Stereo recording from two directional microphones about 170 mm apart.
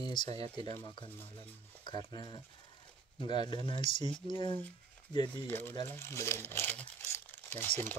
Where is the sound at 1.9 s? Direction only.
25° left (ahead or behind).